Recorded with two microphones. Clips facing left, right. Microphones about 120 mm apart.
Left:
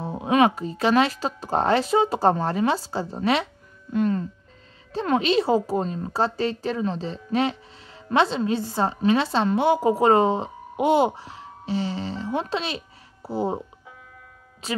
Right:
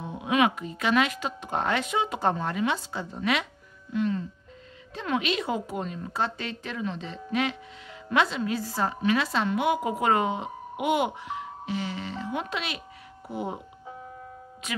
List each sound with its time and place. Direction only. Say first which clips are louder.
0.0 s a woman's voice: left 5 dB; 35° left (ahead or behind)
3.9 s a woman's voice: left 4 dB; 45° left (ahead or behind)